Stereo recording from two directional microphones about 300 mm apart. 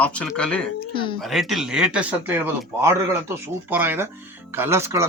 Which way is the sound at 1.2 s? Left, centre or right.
Centre.